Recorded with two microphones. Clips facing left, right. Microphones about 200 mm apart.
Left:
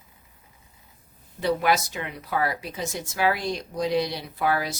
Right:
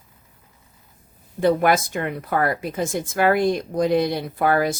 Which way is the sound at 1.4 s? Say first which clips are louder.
Right 5 dB; 50° right (ahead or behind).